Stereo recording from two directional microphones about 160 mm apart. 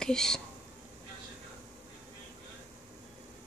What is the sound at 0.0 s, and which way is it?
Speech, 5° left (ahead or behind).